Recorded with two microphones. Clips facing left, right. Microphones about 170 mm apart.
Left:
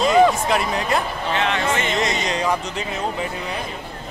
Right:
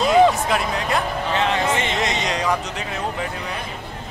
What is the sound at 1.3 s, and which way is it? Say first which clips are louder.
Speech: even; 35° right (ahead or behind).